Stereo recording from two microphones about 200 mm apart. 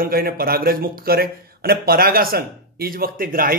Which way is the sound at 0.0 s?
45° right (ahead or behind).